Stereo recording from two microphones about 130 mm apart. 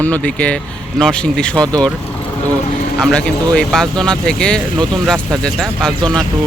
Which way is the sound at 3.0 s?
5° left (ahead or behind).